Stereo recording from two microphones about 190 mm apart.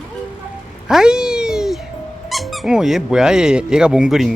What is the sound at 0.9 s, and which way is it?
Cat, 5° right (ahead or behind).